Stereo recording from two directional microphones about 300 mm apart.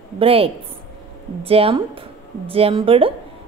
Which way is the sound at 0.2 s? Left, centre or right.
Centre.